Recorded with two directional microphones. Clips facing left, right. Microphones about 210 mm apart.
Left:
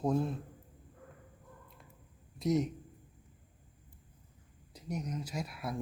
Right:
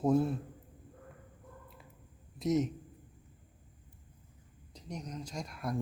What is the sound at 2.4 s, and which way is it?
Speech, centre (ahead or behind).